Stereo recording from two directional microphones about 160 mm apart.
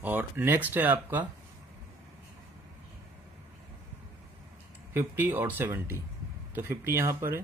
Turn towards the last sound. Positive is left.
turn(degrees=-15)  # may be behind; listen again after turning